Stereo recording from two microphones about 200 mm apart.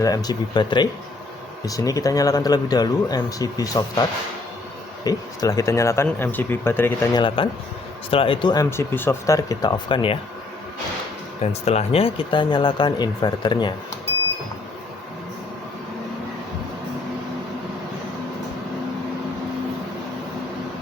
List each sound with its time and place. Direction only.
0.0 s speech: 20° left (ahead or behind)
5.0 s speech: 15° left (ahead or behind)
7.2 s speech: 25° left (ahead or behind)
11.6 s speech: 30° left (ahead or behind)